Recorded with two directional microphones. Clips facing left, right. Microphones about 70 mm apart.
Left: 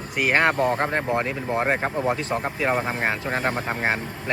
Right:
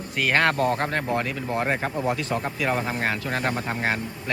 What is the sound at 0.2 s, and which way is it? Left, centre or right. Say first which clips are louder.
Speech: left 1 dB; centre.